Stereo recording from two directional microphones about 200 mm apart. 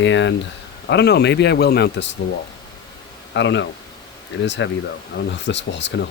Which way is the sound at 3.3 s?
65° left (ahead or behind).